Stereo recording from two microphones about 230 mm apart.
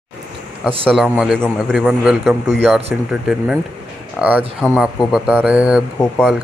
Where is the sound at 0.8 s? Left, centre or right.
Centre.